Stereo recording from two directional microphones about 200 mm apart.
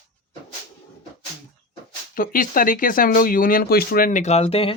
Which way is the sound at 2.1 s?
45° left (ahead or behind).